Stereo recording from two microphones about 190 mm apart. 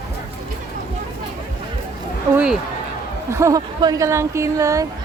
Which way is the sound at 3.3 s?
15° right (ahead or behind).